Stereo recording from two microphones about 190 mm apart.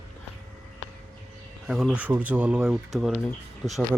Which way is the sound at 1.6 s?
Centre (ahead or behind).